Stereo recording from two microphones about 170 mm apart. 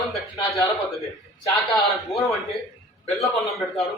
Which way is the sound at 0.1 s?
Centre (ahead or behind).